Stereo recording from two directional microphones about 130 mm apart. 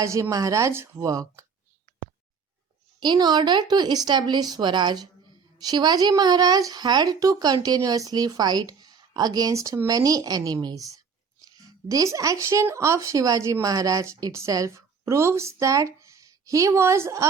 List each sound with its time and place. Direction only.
0.0 s speech: 25° right (ahead or behind)
3.0 s a woman's voice: 35° right (ahead or behind)